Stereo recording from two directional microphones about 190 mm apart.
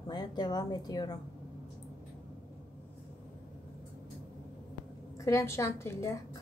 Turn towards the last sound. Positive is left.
turn(degrees=15)  # may be behind; listen again after turning